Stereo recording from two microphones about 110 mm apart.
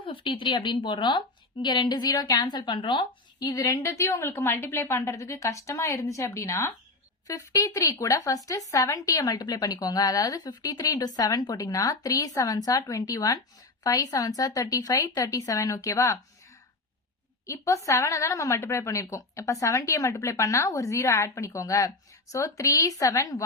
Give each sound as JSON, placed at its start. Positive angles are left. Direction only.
{"t": 0.0, "sound": "a woman's voice", "side_deg": 50}
{"t": 17.4, "sound": "a woman's voice", "side_deg": 30}